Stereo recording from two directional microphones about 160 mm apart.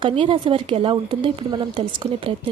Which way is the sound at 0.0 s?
35° right (ahead or behind).